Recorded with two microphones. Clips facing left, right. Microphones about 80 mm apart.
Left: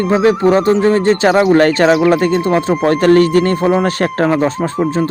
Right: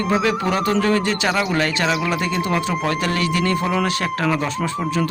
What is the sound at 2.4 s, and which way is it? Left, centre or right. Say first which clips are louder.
Speech: left 8 dB; left.